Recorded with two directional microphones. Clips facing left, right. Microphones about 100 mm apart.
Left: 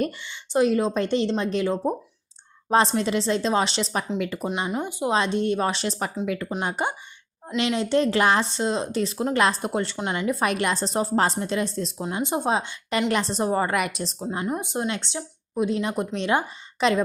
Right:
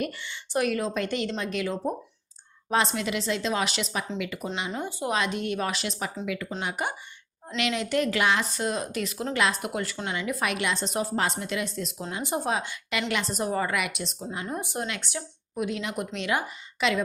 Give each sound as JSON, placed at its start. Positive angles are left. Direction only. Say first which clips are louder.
{"t": 0.3, "sound": "a woman's voice", "louder": "left 6 dB", "side_deg": 20}
{"t": 4.7, "sound": "speech", "louder": "left 4 dB", "side_deg": 15}
{"t": 5.1, "sound": "a woman's voice", "louder": "left 6 dB", "side_deg": 30}
{"t": 10.2, "sound": "a woman's voice", "louder": "left 5 dB", "side_deg": 40}
{"t": 12.1, "sound": "a woman's voice", "louder": "left 4 dB", "side_deg": 20}
{"t": 14.4, "sound": "a woman's voice", "louder": "left 5 dB", "side_deg": 20}